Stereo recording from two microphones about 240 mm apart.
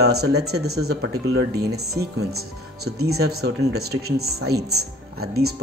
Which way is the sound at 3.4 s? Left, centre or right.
Right.